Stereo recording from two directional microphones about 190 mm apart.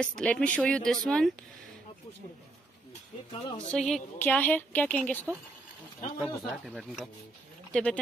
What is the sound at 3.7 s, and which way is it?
A woman's voice, centre (ahead or behind).